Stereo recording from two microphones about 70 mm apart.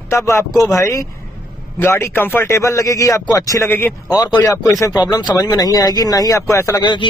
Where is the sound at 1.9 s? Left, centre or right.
Left.